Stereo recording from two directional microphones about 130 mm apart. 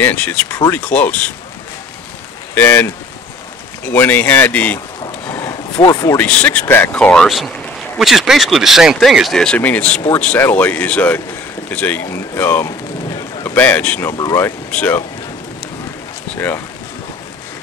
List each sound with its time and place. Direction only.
0.0 s speech: 10° left (ahead or behind)
2.5 s speech: 15° left (ahead or behind)
5.2 s a sound: 15° left (ahead or behind)
5.8 s a man's voice: 20° left (ahead or behind)
14.1 s speech: 25° left (ahead or behind)
14.7 s speech: 10° left (ahead or behind)
16.3 s speech: 15° left (ahead or behind)